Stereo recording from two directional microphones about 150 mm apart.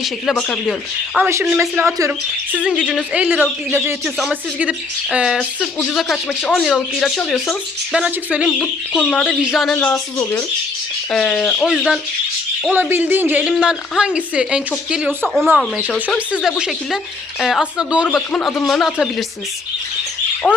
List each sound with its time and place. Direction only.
0.0 s speech: centre (ahead or behind)
1.2 s speech: 20° right (ahead or behind)
2.6 s speech: 5° right (ahead or behind)
4.0 s speech: centre (ahead or behind)
7.9 s speech: 5° right (ahead or behind)
8.4 s speech: 5° left (ahead or behind)
9.7 s speech: 10° left (ahead or behind)
11.1 s speech: 5° left (ahead or behind)
12.7 s speech: 10° right (ahead or behind)
20.4 s speech: 10° left (ahead or behind)